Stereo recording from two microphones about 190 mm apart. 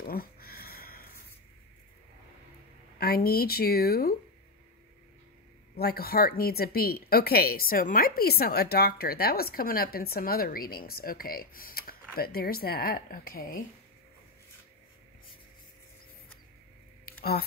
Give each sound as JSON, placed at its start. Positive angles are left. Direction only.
{"t": 0.0, "sound": "a sound", "side_deg": 50}
{"t": 3.0, "sound": "speech", "side_deg": 55}
{"t": 5.8, "sound": "speech", "side_deg": 55}